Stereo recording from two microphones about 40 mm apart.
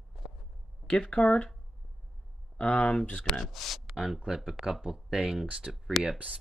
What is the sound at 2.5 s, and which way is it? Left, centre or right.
Speech, left.